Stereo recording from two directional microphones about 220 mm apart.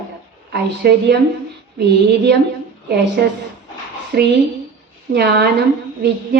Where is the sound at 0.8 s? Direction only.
45° right (ahead or behind).